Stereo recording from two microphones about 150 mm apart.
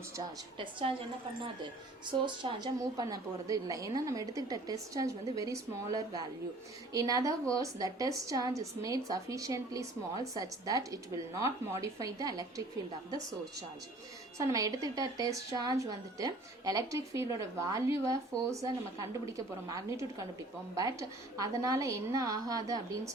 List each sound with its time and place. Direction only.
0.6 s a woman's voice: 35° right (ahead or behind)
2.0 s a woman's voice: 30° right (ahead or behind)
14.3 s a woman's voice: 25° right (ahead or behind)